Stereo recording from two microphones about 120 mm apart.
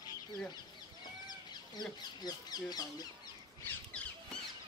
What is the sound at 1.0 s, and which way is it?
Speech, 35° left (ahead or behind).